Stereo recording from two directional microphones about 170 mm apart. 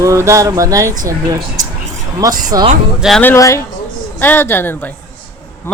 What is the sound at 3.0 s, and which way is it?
Speech, centre (ahead or behind).